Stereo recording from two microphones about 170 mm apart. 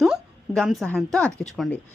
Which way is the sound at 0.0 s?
Centre (ahead or behind).